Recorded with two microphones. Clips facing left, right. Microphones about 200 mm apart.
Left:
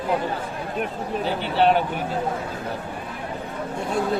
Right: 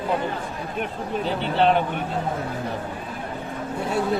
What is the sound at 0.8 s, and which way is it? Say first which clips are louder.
Speech: even; centre (ahead or behind).